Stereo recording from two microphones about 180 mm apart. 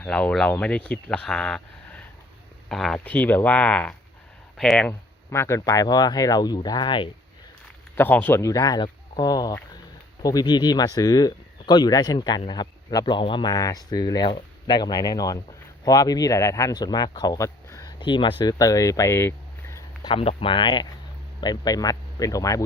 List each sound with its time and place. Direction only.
0.0 s speech: 5° left (ahead or behind); by 7.1 s 25° left (ahead or behind)
7.9 s speech: 10° left (ahead or behind)
20.1 s speech: 30° left (ahead or behind)